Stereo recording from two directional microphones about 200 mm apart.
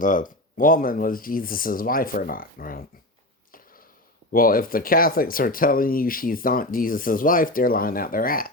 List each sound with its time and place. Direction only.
0.0 s speech: 40° left (ahead or behind)
4.3 s speech: 45° left (ahead or behind)